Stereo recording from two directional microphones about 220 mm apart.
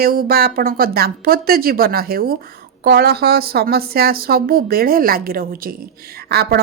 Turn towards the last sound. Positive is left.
turn(degrees=-45)  # may be behind; listen again after turning